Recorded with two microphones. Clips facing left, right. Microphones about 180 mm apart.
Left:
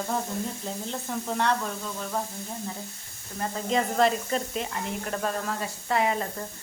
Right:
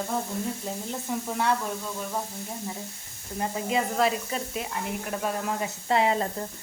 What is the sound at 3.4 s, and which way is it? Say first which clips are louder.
Speech: even; 10° right (ahead or behind).